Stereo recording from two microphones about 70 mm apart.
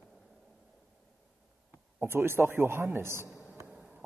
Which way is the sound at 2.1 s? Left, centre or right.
Right.